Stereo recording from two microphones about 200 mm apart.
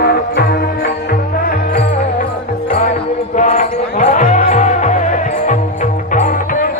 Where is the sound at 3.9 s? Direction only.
40° left (ahead or behind).